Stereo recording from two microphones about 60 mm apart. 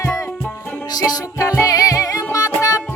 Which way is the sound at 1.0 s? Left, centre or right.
Left.